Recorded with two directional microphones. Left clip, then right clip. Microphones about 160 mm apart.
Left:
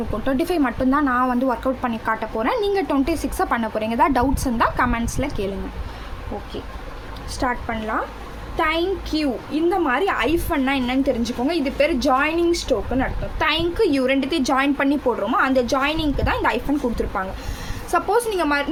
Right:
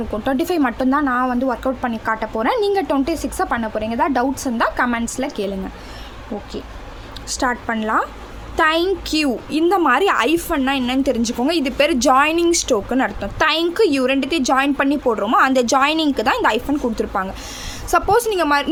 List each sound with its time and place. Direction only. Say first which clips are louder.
0.1 s speech: right 3 dB; 20° right (ahead or behind)
7.3 s a woman's voice: right 4 dB; 30° right (ahead or behind)
10.5 s a woman's voice: right 2 dB; 25° right (ahead or behind)